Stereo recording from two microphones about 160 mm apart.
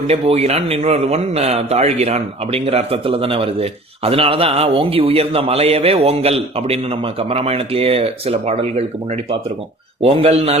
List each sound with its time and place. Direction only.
0.1 s a man's voice: 40° right (ahead or behind)
10.0 s a man's voice: 40° right (ahead or behind)